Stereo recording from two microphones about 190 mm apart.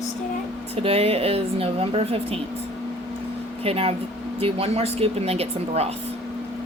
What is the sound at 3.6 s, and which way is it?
A woman's voice, 30° right (ahead or behind).